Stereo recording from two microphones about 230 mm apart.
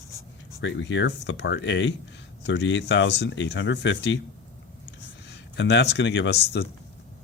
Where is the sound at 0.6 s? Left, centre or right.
Left.